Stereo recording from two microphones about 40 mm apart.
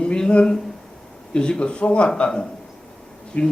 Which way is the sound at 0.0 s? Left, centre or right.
Left.